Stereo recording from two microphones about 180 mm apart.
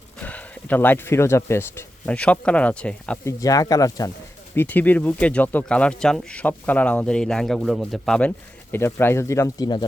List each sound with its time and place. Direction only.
0.2 s speech: 10° left (ahead or behind)
3.4 s speech: 20° left (ahead or behind)